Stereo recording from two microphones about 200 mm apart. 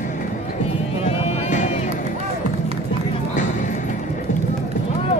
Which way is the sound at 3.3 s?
40° left (ahead or behind).